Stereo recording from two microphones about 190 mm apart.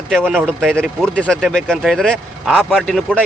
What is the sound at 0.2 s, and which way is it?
Speech, 10° right (ahead or behind).